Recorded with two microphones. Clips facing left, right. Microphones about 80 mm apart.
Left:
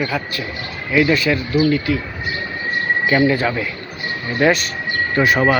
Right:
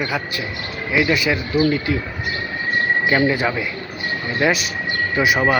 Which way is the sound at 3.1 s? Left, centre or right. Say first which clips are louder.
Left 4 dB; centre.